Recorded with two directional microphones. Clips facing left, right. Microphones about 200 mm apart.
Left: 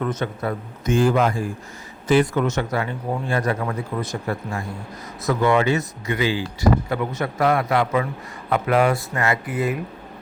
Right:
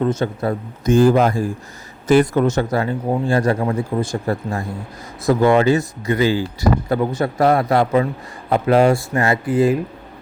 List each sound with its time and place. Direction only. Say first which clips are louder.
0.0 s speech: right 5 dB; 30° right (ahead or behind)